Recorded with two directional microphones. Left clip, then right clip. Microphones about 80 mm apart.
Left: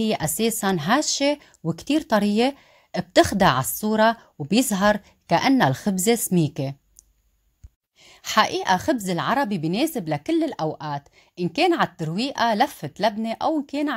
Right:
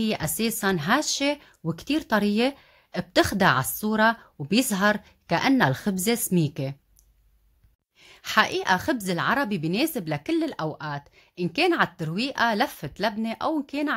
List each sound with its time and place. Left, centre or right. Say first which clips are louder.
0.0 s a woman's voice: left 4 dB; left
8.0 s a woman's voice: left 2 dB; left